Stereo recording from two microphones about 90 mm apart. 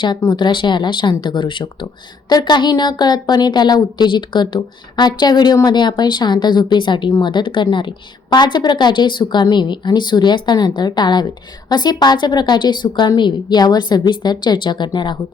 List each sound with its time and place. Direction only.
0.3 s a woman's voice: 60° left (ahead or behind)
8.3 s a woman's voice: 55° left (ahead or behind)